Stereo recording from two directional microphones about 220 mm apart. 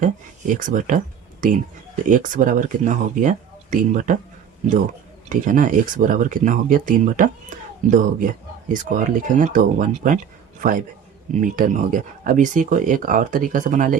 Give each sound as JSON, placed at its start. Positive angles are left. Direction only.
{"t": 0.0, "sound": "speech", "side_deg": -35}
{"t": 5.3, "sound": "a man's voice", "side_deg": -35}